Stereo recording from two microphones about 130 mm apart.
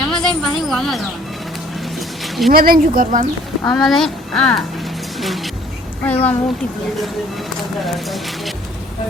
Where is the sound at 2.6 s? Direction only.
90° right.